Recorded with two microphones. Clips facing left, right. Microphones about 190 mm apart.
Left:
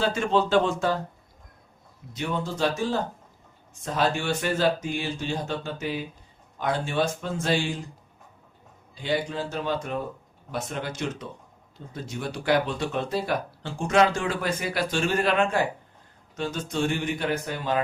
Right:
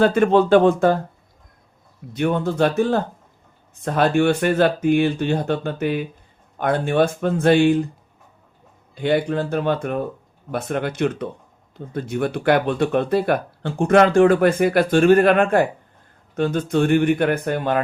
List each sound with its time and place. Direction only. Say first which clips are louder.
0.0 s speech: right 9 dB; 55° right (ahead or behind)
2.1 s speech: right 9 dB; 55° right (ahead or behind)
9.0 s speech: right 8 dB; 60° right (ahead or behind)